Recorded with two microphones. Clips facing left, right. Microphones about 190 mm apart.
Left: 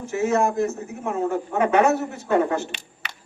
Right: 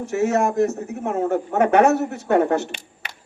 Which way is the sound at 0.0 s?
75° right (ahead or behind).